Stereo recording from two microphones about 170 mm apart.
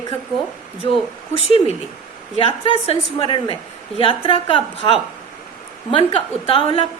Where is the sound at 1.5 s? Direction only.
40° left (ahead or behind).